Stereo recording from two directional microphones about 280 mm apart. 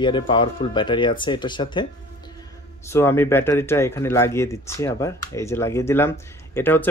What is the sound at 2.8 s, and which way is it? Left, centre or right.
Speech, centre.